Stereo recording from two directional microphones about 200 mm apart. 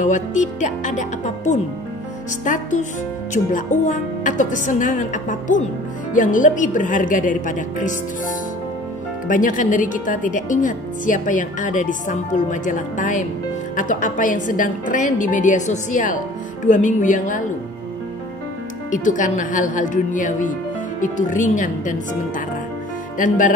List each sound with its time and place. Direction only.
0.0 s speech: 40° left (ahead or behind)
9.3 s speech: 40° left (ahead or behind)
18.9 s speech: 40° left (ahead or behind)
23.1 s speech: 40° left (ahead or behind)